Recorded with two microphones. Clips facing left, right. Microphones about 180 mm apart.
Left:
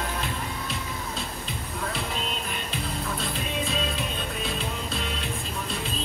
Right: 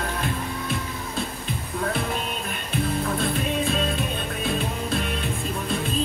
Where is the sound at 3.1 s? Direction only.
55° right (ahead or behind).